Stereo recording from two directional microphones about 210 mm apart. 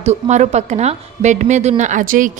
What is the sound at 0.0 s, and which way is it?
A woman's voice, 35° right (ahead or behind).